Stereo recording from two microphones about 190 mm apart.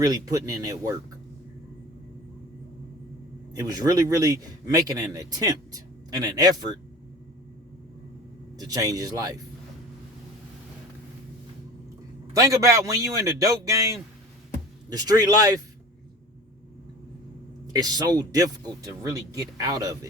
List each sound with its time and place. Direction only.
0.0 s speech: 20° right (ahead or behind)
3.5 s speech: 20° right (ahead or behind)
8.5 s a man's voice: 20° right (ahead or behind)
12.3 s a man's voice: 20° right (ahead or behind)
17.7 s speech: 20° right (ahead or behind)